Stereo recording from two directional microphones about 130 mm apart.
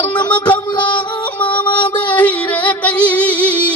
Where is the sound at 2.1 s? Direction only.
10° left (ahead or behind).